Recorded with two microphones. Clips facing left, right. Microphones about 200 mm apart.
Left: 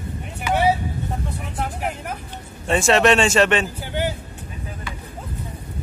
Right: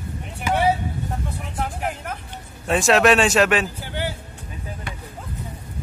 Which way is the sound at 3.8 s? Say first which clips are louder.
Left 3 dB; 15° left (ahead or behind).